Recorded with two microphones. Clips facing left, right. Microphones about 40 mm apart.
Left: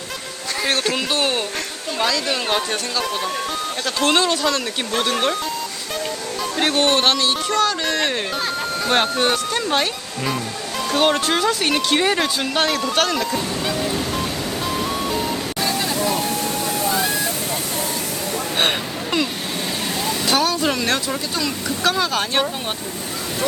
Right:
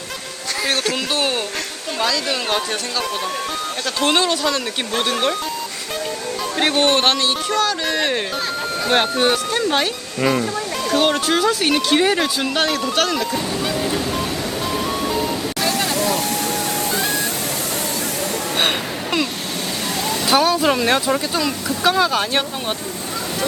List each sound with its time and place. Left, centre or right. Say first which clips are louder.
1.1 s a sound: even; centre
2.0 s speech: even; centre
4.1 s speech: even; centre
6.6 s speech: right 1 dB; right
7.0 s speech: even; centre
7.6 s speech: even; centre
10.9 s speech: right 1 dB; centre
14.7 s music: right 1 dB; centre
15.8 s vehicle: right 1 dB; right
20.1 s speech: right 4 dB; centre